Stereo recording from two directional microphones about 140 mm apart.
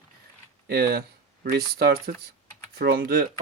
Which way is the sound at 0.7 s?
90° right.